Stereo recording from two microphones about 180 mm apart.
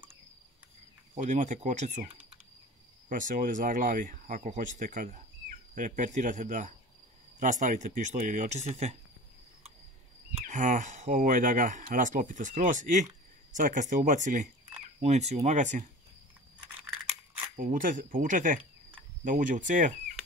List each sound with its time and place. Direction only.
1.1 s speech: 40° right (ahead or behind)
10.3 s speech: 45° right (ahead or behind)
17.6 s speech: 50° right (ahead or behind)